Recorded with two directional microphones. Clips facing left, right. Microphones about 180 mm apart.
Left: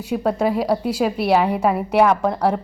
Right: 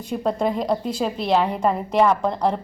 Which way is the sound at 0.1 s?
5° left (ahead or behind).